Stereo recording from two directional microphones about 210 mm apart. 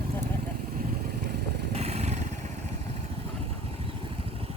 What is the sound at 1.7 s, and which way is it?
Vehicle, 30° right (ahead or behind).